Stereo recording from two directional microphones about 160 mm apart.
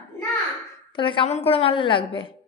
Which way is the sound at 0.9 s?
30° left (ahead or behind).